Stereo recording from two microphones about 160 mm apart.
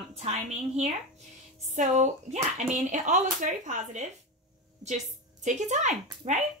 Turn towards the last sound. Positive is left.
turn(degrees=-50)  # may be behind; listen again after turning